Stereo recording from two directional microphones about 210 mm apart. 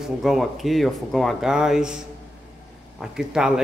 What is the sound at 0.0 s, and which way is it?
Speech, centre (ahead or behind).